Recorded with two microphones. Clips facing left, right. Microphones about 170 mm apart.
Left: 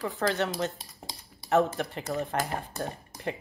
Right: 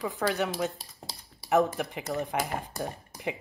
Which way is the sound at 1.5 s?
15° right (ahead or behind).